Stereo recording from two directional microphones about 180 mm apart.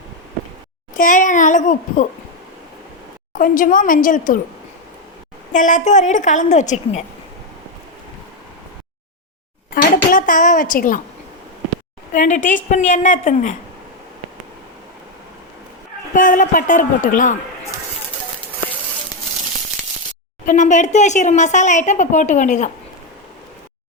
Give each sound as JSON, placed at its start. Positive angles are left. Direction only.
{"t": 0.9, "sound": "a woman's voice", "side_deg": 45}
{"t": 3.3, "sound": "a woman's voice", "side_deg": 50}
{"t": 5.5, "sound": "speech", "side_deg": 45}
{"t": 9.7, "sound": "speech", "side_deg": 50}
{"t": 12.1, "sound": "a woman's voice", "side_deg": 45}
{"t": 16.1, "sound": "a woman's voice", "side_deg": 45}
{"t": 20.4, "sound": "speech", "side_deg": 45}